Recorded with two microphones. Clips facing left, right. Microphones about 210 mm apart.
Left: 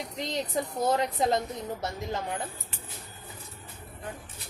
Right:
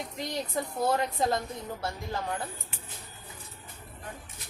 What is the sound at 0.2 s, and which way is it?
A woman's voice, 20° left (ahead or behind).